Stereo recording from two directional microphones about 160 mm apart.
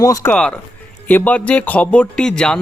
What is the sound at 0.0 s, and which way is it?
Speech, 20° left (ahead or behind).